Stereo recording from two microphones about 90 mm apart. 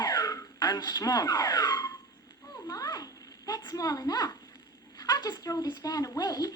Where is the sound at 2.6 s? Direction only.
45° left (ahead or behind).